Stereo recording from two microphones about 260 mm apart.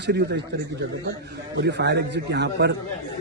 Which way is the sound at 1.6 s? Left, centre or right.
Right.